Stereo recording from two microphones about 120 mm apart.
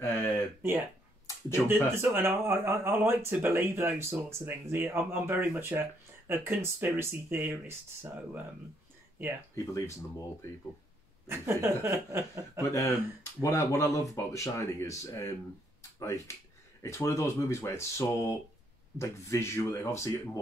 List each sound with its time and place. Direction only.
0.0 s a sound: 20° left (ahead or behind)
0.6 s speech: 15° right (ahead or behind)
9.6 s speech: 30° left (ahead or behind)
11.2 s speech: 20° right (ahead or behind)
12.7 s speech: 25° left (ahead or behind)